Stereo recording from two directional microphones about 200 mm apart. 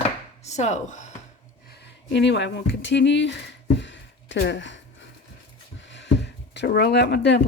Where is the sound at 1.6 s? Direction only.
55° left (ahead or behind).